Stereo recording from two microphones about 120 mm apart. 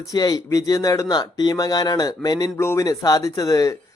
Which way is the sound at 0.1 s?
30° left (ahead or behind).